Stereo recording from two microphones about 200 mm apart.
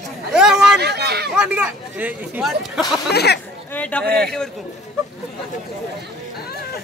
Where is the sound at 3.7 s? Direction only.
5° left (ahead or behind).